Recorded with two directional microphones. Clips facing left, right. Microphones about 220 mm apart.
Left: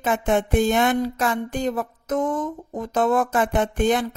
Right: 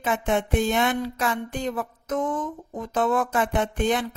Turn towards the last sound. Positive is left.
turn(degrees=45)  # may be behind; listen again after turning